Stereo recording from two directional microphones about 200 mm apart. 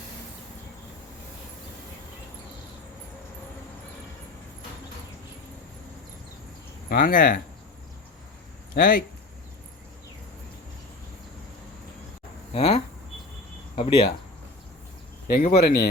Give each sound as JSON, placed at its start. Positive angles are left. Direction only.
{"t": 6.9, "sound": "speech", "side_deg": 45}
{"t": 8.7, "sound": "speech", "side_deg": 45}
{"t": 12.5, "sound": "a sound", "side_deg": 30}
{"t": 13.7, "sound": "speech", "side_deg": 30}
{"t": 15.3, "sound": "speech", "side_deg": 45}